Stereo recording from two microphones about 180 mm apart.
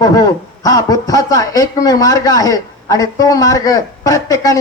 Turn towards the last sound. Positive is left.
turn(degrees=20)  # may be behind; listen again after turning